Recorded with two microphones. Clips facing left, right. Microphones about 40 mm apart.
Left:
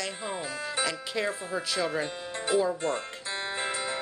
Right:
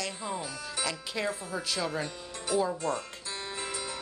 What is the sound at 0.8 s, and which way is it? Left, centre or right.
Speech, centre.